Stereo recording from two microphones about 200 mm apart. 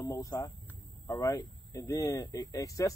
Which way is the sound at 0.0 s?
15° left (ahead or behind).